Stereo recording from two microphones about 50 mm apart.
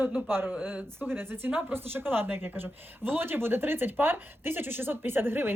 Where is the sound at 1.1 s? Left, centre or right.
Right.